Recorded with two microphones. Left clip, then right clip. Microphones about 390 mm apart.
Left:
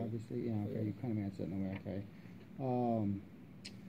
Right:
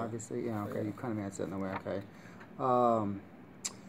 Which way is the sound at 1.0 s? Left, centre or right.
Centre.